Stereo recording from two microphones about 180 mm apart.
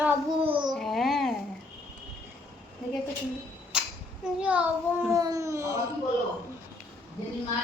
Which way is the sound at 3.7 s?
5° right (ahead or behind).